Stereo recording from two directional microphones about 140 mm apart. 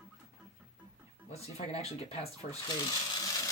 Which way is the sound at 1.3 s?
50° left (ahead or behind).